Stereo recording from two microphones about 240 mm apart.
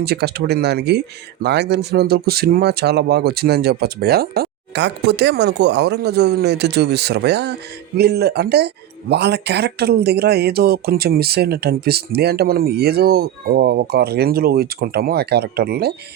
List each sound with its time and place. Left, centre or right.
0.0 s speech: right